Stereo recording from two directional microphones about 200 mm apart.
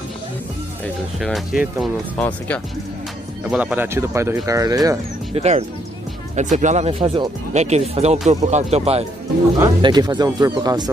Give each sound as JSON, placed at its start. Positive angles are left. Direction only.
{"t": 1.2, "sound": "speech", "side_deg": 0}
{"t": 3.4, "sound": "speech", "side_deg": -5}
{"t": 5.3, "sound": "speech", "side_deg": -35}
{"t": 9.6, "sound": "speech", "side_deg": -20}